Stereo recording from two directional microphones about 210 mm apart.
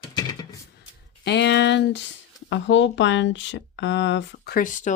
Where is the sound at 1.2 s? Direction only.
55° left (ahead or behind).